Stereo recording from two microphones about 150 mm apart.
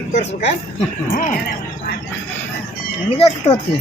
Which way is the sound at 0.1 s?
50° left (ahead or behind).